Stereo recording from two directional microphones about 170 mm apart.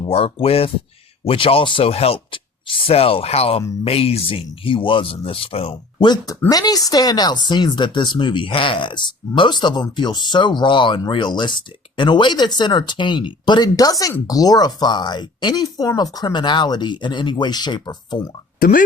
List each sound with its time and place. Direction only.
0.0 s speech: 35° left (ahead or behind)
18.6 s speech: 55° left (ahead or behind)